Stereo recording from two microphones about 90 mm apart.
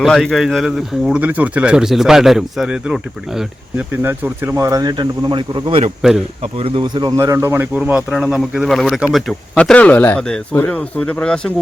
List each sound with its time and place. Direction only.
0.0 s speech: 5° left (ahead or behind)
1.2 s a man's voice: 20° right (ahead or behind)
3.8 s speech: 25° right (ahead or behind)
4.9 s speech: 60° right (ahead or behind)
6.0 s speech: 5° right (ahead or behind)
6.6 s speech: 90° right
6.8 s speech: 55° right (ahead or behind)
7.2 s speech: 30° right (ahead or behind)
7.7 s a man's voice: 15° right (ahead or behind)
8.1 s speech: 5° right (ahead or behind)
9.6 s speech: 15° left (ahead or behind)
10.2 s speech: 10° left (ahead or behind)